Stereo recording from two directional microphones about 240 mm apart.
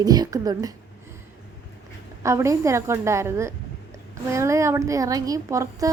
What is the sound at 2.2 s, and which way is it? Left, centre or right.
A woman's voice, centre.